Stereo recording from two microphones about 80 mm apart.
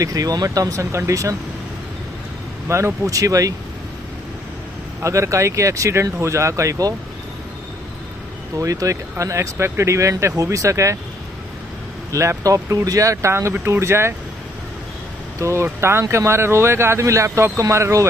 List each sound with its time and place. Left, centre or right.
0.0 s speech: right
2.7 s speech: right
5.0 s speech: right
8.5 s speech: right
12.1 s speech: right
15.4 s speech: right